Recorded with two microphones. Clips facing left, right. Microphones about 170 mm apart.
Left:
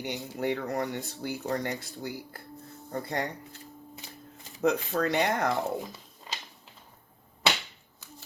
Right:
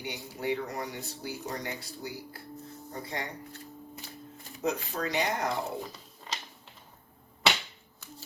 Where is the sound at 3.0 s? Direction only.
55° left (ahead or behind).